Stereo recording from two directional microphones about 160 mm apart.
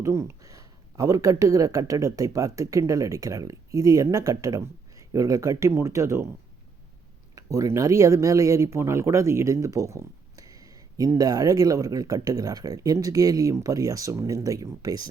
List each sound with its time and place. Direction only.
0.0 s speech: 20° right (ahead or behind)
7.3 s speech: 20° right (ahead or behind)